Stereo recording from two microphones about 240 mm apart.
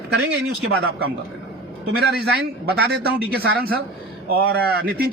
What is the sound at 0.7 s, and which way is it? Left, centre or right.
Speech, right.